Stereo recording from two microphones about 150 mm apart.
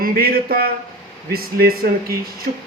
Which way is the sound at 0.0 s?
80° right.